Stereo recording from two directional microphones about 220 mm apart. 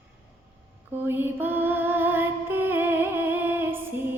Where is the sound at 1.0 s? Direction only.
10° right (ahead or behind).